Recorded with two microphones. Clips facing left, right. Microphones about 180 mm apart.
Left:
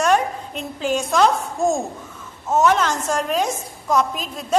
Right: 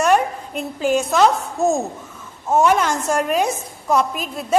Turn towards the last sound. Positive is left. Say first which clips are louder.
# right 2 dB
turn(degrees=-5)  # may be behind; listen again after turning